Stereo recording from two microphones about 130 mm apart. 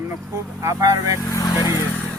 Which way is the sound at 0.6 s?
25° right (ahead or behind).